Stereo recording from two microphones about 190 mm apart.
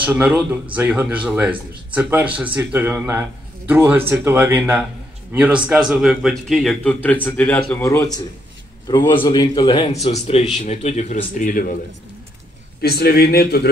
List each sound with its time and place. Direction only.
0.0 s a man's voice: 10° right (ahead or behind); by 11.6 s 45° left (ahead or behind)
12.8 s a man's voice: 55° left (ahead or behind)